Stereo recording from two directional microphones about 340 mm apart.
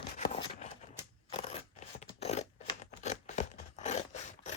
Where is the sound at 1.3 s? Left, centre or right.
Centre.